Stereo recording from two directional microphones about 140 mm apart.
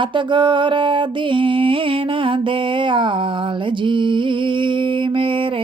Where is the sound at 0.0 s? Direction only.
35° right (ahead or behind).